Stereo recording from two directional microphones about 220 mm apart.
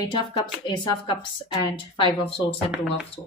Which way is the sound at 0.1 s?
20° left (ahead or behind).